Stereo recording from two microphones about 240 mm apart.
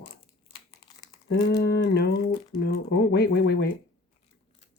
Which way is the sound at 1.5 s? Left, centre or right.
Left.